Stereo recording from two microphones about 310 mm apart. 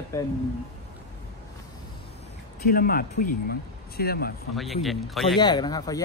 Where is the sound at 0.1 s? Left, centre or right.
Centre.